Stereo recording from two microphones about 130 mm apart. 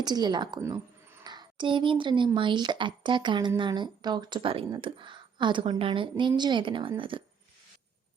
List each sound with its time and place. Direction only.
0.0 s speech: 35° right (ahead or behind)